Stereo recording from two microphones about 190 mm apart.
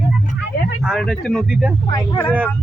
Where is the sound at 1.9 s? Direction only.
10° left (ahead or behind).